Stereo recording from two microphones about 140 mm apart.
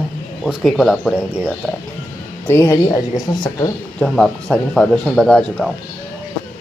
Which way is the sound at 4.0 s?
5° left (ahead or behind).